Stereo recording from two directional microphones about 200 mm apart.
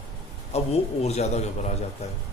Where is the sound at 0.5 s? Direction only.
30° left (ahead or behind).